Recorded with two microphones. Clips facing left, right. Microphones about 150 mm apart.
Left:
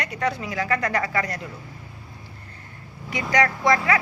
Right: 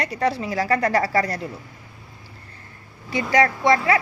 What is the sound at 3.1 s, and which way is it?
Speech, 30° right (ahead or behind).